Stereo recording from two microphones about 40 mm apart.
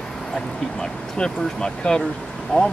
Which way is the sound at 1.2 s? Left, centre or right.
Centre.